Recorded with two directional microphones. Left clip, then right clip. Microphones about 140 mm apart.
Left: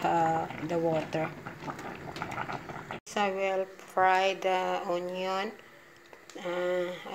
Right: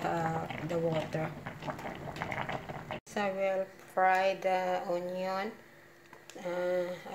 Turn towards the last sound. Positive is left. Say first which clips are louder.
# left 2 dB
turn(degrees=20)  # may be behind; listen again after turning